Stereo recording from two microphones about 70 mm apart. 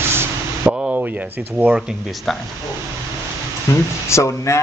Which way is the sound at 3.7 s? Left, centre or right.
Left.